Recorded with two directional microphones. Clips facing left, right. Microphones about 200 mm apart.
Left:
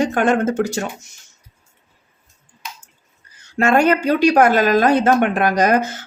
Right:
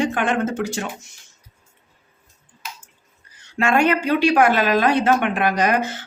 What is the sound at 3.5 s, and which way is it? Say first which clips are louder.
Speech: left 3 dB; 45° left (ahead or behind).